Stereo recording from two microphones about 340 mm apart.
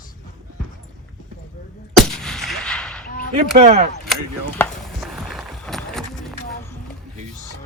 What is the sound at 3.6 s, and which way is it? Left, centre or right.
Speech, right.